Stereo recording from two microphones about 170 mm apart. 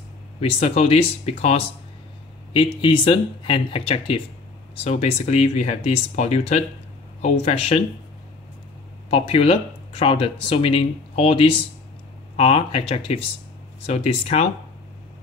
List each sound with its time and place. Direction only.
0.4 s speech: 40° left (ahead or behind)
9.1 s speech: 35° left (ahead or behind)